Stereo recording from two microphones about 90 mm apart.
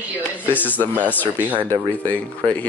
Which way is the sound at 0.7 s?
20° right (ahead or behind).